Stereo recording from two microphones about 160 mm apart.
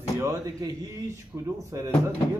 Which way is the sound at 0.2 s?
20° right (ahead or behind).